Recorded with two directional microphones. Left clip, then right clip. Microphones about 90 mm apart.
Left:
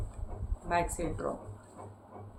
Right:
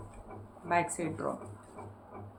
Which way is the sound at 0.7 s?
15° right (ahead or behind).